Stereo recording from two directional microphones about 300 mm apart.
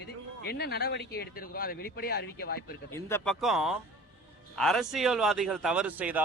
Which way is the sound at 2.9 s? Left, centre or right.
Centre.